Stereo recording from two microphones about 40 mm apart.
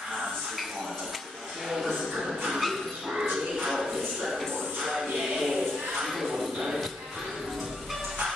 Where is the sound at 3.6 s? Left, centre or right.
Centre.